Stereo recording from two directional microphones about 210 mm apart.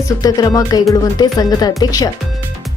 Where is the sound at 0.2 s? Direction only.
15° left (ahead or behind).